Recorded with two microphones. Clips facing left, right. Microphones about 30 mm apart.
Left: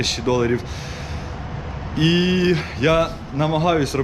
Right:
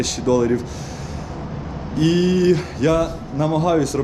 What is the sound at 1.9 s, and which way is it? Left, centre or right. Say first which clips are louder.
Speech: right 1 dB; left.